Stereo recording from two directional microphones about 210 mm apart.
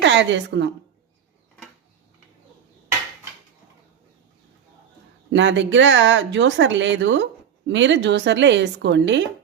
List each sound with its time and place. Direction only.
0.0 s a woman's voice: 60° right (ahead or behind)
5.3 s speech: 60° right (ahead or behind)